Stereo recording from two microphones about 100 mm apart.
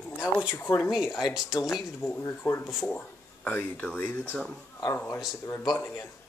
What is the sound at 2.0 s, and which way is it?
Speech, 20° left (ahead or behind).